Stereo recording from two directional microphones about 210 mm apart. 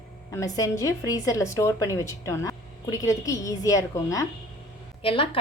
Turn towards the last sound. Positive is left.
turn(degrees=25)  # may be behind; listen again after turning